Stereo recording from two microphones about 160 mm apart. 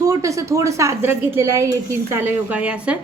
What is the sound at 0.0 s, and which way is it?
A woman's voice, 20° right (ahead or behind).